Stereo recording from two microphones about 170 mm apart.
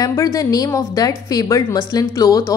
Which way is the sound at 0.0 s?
20° left (ahead or behind).